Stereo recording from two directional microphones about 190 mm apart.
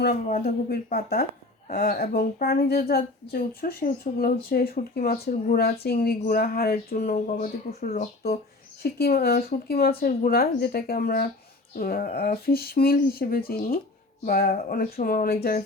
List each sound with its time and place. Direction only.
0.3 s speech: 50° left (ahead or behind)
1.7 s speech: 45° left (ahead or behind)
8.8 s speech: 55° left (ahead or behind)